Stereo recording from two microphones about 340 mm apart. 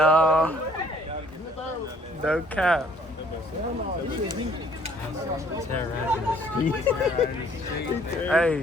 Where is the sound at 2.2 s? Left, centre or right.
Centre.